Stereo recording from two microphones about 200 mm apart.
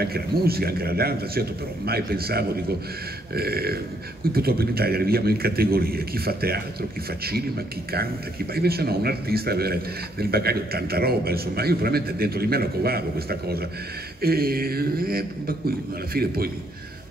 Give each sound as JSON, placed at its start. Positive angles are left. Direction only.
{"t": 0.0, "sound": "a man's voice", "side_deg": -50}